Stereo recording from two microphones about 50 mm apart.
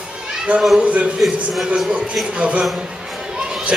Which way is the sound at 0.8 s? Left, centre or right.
Right.